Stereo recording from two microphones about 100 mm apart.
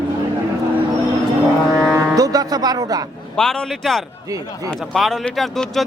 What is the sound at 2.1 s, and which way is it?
Music, 35° right (ahead or behind).